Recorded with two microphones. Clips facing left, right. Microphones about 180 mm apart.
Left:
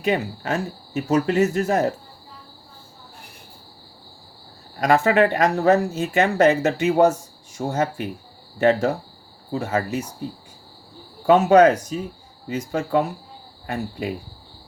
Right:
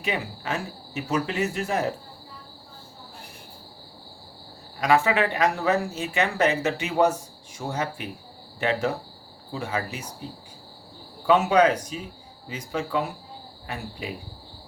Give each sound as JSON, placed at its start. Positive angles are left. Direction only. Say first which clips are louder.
{"t": 0.0, "sound": "speech", "louder": "left 7 dB", "side_deg": 45}
{"t": 4.8, "sound": "speech", "louder": "left 4 dB", "side_deg": 45}
{"t": 11.3, "sound": "speech", "louder": "left 5 dB", "side_deg": 45}